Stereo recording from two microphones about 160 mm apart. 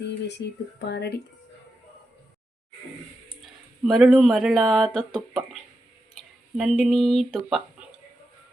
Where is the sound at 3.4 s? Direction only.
Centre (ahead or behind).